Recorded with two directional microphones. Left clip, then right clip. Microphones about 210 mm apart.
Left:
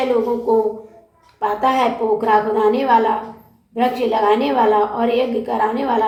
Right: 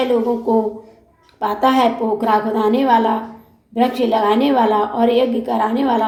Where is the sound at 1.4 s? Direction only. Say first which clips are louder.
Right 1 dB; 45° right (ahead or behind).